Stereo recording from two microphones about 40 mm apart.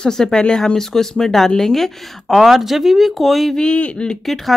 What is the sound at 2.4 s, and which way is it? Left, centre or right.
A woman's voice, centre.